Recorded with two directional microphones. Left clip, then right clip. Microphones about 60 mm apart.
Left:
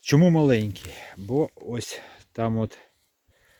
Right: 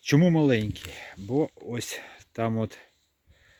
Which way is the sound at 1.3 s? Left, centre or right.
Centre.